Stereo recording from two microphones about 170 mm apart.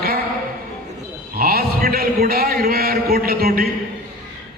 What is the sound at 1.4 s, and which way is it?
A man's voice, 60° right (ahead or behind).